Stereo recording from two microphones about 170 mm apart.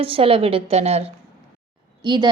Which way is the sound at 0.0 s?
30° right (ahead or behind).